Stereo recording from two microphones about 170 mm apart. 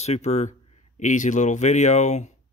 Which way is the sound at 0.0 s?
40° left (ahead or behind).